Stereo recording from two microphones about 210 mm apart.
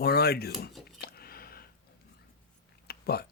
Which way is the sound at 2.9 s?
50° left (ahead or behind).